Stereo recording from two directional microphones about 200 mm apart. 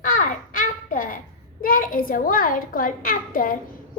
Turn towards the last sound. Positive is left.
turn(degrees=45)  # may be behind; listen again after turning